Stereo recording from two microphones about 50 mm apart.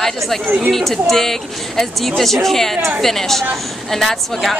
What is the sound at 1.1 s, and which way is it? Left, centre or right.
Speech, centre.